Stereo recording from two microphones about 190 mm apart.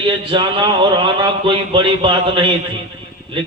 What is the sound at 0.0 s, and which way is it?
Mantra, 25° right (ahead or behind).